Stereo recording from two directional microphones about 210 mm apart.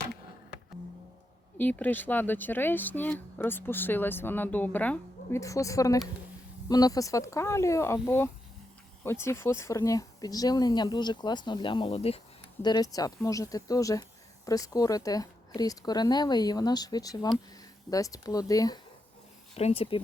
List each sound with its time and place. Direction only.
1.5 s speech: 10° left (ahead or behind); by 12.2 s 30° left (ahead or behind)
12.6 s speech: 20° left (ahead or behind)
19.5 s speech: 30° left (ahead or behind)